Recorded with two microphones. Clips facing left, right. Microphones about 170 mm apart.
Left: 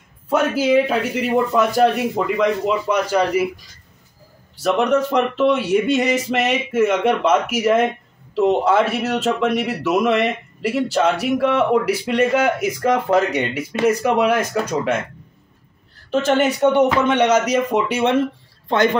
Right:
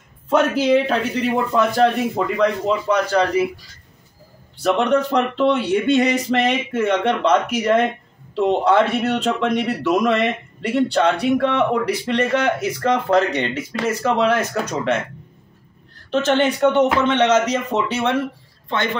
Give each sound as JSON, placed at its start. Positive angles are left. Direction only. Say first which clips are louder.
{"t": 0.3, "sound": "a man's voice", "louder": "right 1 dB", "side_deg": 5}
{"t": 4.6, "sound": "a man's voice", "louder": "even", "side_deg": 5}
{"t": 16.1, "sound": "a man's voice", "louder": "even", "side_deg": 10}
{"t": 18.7, "sound": "a man's voice", "louder": "left 6 dB", "side_deg": 40}